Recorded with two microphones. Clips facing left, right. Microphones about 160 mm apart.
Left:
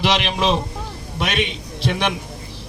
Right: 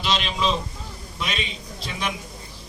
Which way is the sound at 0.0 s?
80° left.